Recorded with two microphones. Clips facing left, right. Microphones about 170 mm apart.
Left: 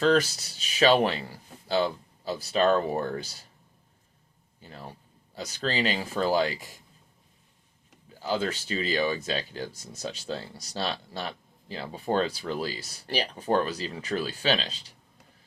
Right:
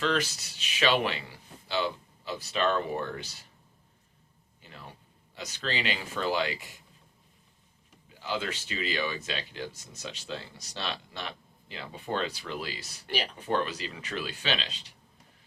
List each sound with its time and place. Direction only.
0.0 s speech: 40° left (ahead or behind)
4.6 s speech: 40° left (ahead or behind)
8.2 s speech: 40° left (ahead or behind)